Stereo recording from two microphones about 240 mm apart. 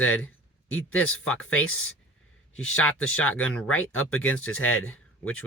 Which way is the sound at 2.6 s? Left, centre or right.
Left.